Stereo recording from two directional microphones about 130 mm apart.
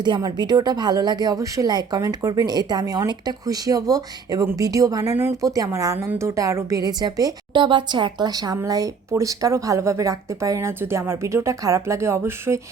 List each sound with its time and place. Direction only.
0.0 s a woman's voice: 35° right (ahead or behind)